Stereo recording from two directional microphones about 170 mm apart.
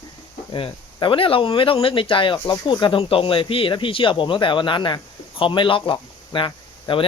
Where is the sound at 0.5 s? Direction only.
30° left (ahead or behind).